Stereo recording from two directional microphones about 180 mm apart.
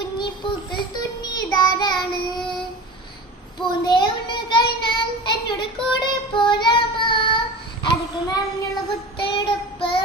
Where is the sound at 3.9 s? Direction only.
25° left (ahead or behind).